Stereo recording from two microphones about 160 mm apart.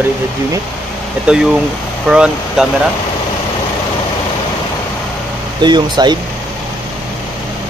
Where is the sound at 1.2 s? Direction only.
5° right (ahead or behind).